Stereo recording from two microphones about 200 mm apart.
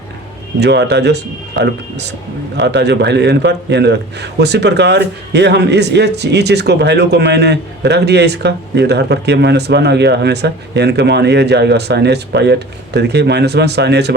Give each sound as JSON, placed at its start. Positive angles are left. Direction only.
{"t": 0.6, "sound": "a man's voice", "side_deg": -60}